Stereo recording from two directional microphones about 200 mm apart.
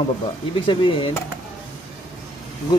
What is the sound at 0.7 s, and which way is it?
Speech, 25° left (ahead or behind).